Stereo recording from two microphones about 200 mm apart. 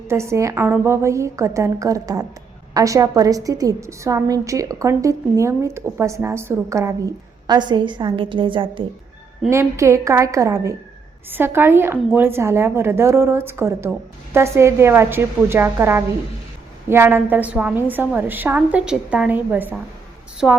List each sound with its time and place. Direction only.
0.1 s a woman's voice: 15° right (ahead or behind)
9.5 s a woman's voice: 15° right (ahead or behind)